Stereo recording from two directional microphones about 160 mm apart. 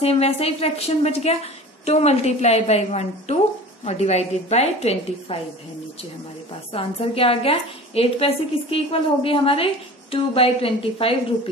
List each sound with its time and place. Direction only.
0.0 s a woman's voice: 40° left (ahead or behind)
6.7 s a woman's voice: 35° left (ahead or behind)